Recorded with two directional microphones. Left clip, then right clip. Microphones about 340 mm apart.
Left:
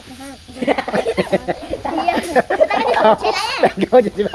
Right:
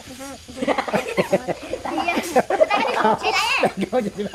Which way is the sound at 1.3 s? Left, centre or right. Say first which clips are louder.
Left 3 dB; centre.